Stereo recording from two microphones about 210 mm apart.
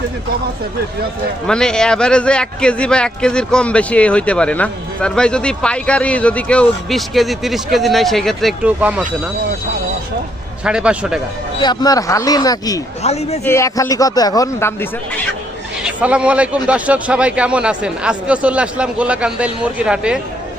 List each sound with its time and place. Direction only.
1.5 s a man's voice: 5° left (ahead or behind)
10.6 s a man's voice: 5° right (ahead or behind)
11.6 s a man's voice: 20° left (ahead or behind)
13.0 s a man's voice: 30° left (ahead or behind)
13.4 s a man's voice: 15° left (ahead or behind)
15.8 s a man's voice: 5° right (ahead or behind)